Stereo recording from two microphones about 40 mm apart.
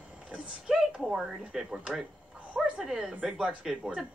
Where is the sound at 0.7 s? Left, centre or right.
Centre.